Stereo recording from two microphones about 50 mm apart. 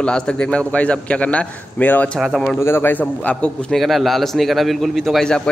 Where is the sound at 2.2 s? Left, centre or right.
Centre.